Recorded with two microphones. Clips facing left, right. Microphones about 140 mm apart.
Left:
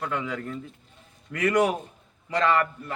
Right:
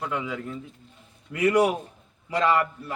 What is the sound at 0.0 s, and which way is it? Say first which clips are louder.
A man's voice: even; 10° right (ahead or behind).